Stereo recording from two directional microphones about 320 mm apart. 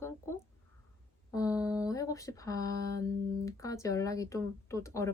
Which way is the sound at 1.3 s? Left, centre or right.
Centre.